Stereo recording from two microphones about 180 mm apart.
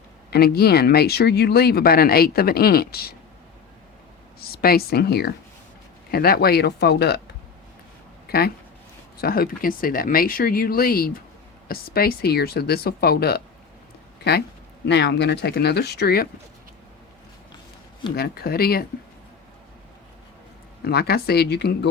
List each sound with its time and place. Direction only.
0.3 s speech: 60° left (ahead or behind)
4.4 s speech: 60° left (ahead or behind)
8.3 s speech: 60° left (ahead or behind)
14.8 s speech: 70° left (ahead or behind)
18.2 s speech: 60° left (ahead or behind)
20.8 s speech: 60° left (ahead or behind)